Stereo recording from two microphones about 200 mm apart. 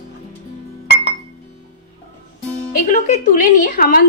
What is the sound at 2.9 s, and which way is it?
Speech, 40° left (ahead or behind).